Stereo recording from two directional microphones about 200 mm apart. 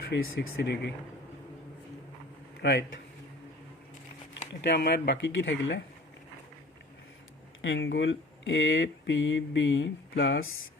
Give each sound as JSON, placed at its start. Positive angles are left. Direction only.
{"t": 0.1, "sound": "speech", "side_deg": 60}
{"t": 2.6, "sound": "a man's voice", "side_deg": 60}
{"t": 4.6, "sound": "speech", "side_deg": 60}
{"t": 7.6, "sound": "speech", "side_deg": 65}